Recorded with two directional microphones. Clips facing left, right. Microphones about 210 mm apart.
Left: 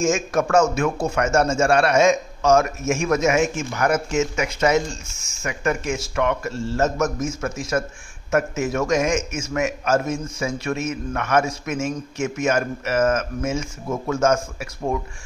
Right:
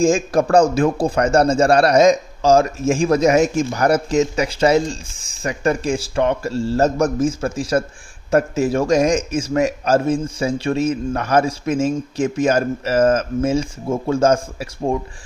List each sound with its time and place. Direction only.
0.0 s a man's voice: 35° right (ahead or behind)